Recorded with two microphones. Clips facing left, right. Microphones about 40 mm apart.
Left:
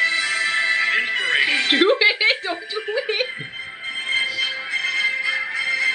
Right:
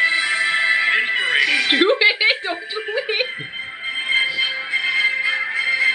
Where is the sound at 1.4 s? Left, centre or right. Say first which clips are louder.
Right 2 dB; centre.